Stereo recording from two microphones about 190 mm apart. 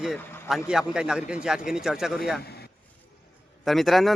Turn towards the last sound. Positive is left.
turn(degrees=0)  # may be behind; listen again after turning